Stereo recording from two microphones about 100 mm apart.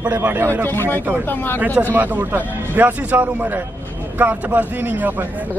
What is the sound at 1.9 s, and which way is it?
Speech, 20° right (ahead or behind).